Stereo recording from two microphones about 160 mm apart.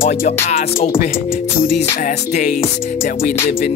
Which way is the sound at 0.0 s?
60° left (ahead or behind).